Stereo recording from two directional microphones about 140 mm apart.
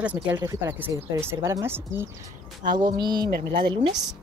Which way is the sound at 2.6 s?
30° right (ahead or behind).